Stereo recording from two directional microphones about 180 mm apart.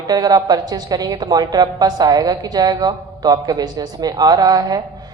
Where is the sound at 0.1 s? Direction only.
20° right (ahead or behind).